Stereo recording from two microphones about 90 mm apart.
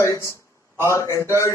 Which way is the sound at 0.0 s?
35° left (ahead or behind).